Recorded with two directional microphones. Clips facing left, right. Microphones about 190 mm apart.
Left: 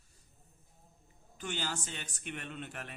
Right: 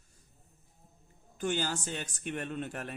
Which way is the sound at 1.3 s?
45° right (ahead or behind).